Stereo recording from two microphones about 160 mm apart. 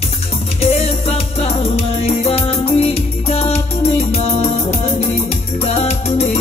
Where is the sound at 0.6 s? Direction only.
40° left (ahead or behind).